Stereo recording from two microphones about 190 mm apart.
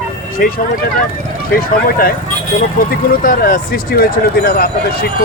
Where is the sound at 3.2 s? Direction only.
50° left (ahead or behind).